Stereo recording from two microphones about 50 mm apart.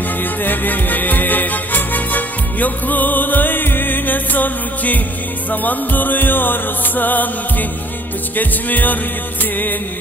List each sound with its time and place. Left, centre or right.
0.2 s music: left
8.4 s music: left